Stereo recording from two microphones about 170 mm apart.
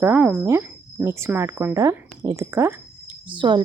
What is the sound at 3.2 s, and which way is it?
Speech, 30° right (ahead or behind).